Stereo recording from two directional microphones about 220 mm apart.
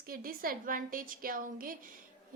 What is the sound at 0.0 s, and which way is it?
A woman's voice, 40° right (ahead or behind).